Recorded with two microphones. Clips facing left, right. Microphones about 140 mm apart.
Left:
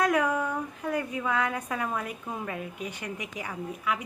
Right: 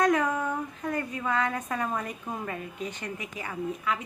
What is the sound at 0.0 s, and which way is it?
Speech, 10° left (ahead or behind).